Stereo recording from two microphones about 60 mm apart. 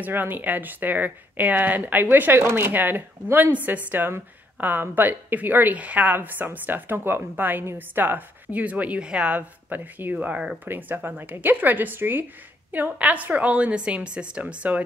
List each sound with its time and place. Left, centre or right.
0.0 s a woman's voice: right